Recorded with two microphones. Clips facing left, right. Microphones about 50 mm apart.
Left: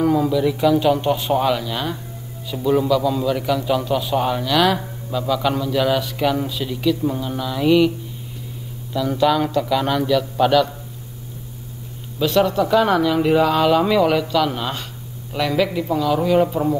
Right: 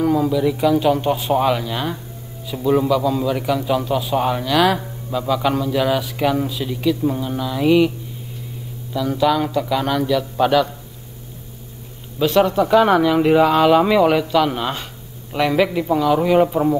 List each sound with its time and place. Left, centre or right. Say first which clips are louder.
0.0 s a man's voice: even; centre
8.9 s a man's voice: even; centre
12.2 s a man's voice: right 2 dB; centre